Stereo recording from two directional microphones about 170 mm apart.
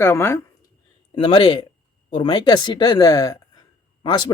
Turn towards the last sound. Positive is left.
turn(degrees=30)  # may be behind; listen again after turning